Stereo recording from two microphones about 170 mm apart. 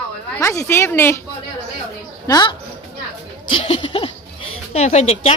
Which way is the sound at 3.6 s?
35° left (ahead or behind).